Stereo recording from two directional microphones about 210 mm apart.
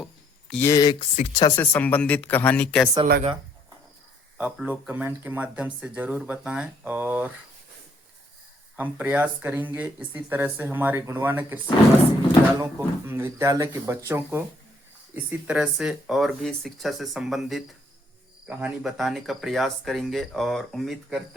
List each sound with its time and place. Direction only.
0.0 s a sound: 5° left (ahead or behind)
1.1 s speech: 25° left (ahead or behind)
1.5 s speech: 10° left (ahead or behind)
4.4 s speech: 5° right (ahead or behind)
8.7 s speech: 5° right (ahead or behind)